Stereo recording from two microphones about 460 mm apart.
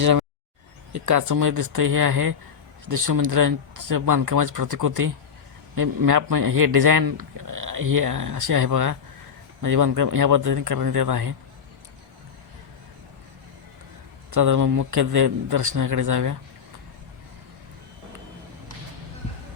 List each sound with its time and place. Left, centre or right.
0.0 s a sound: right
0.9 s speech: right
14.3 s speech: right